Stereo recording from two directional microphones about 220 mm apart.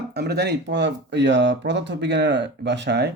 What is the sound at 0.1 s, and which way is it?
Speech, 45° right (ahead or behind).